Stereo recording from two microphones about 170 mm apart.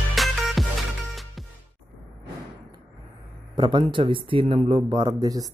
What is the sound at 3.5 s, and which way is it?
A man's voice, 30° right (ahead or behind).